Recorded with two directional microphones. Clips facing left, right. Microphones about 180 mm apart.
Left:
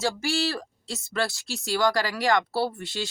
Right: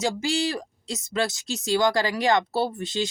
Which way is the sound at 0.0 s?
20° right (ahead or behind).